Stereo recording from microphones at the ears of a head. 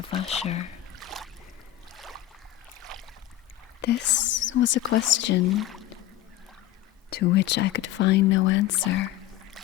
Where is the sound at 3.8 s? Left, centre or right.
Left.